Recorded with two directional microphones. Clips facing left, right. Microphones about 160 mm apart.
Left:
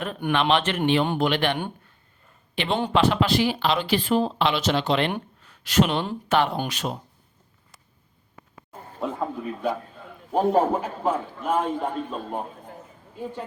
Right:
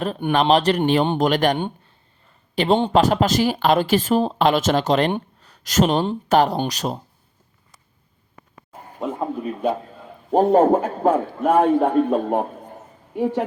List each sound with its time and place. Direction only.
0.2 s speech: 35° right (ahead or behind)
2.6 s speech: 40° right (ahead or behind)
5.4 s a sound: 40° right (ahead or behind)
6.2 s speech: 40° right (ahead or behind)
9.0 s a man's voice: 20° right (ahead or behind)
10.3 s a man's voice: 50° right (ahead or behind); by 12.5 s 65° right (ahead or behind)
13.1 s a woman's voice: 85° right